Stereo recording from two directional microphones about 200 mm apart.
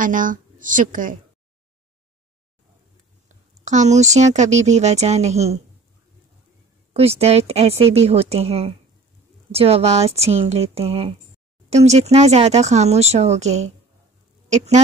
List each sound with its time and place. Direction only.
0.0 s speech: 40° right (ahead or behind)
3.3 s speech: 35° right (ahead or behind)
6.9 s speech: 30° right (ahead or behind)